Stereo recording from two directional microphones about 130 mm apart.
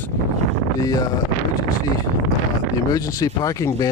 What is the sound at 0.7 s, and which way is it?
Speech, 25° left (ahead or behind).